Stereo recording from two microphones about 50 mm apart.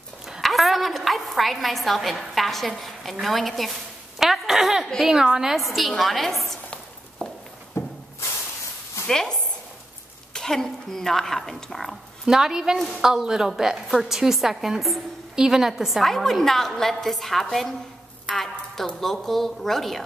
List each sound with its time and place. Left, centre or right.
0.4 s a woman's voice: centre
4.2 s a sound: centre
5.0 s a woman's voice: centre
5.6 s a woman's voice: centre
7.8 s a sound: left
9.0 s a woman's voice: centre
12.3 s a woman's voice: centre